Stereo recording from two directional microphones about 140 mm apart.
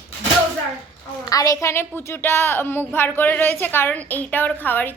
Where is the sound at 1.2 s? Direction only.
25° left (ahead or behind).